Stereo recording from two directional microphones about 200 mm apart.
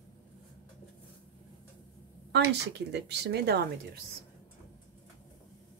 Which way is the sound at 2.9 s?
55° right (ahead or behind).